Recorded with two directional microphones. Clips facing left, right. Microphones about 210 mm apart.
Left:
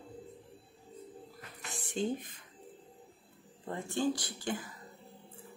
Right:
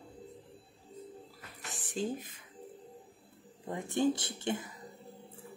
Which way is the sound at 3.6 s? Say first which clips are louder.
Right 2 dB; 15° right (ahead or behind).